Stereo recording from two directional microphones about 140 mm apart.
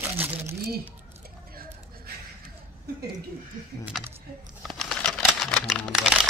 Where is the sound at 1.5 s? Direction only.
90° right.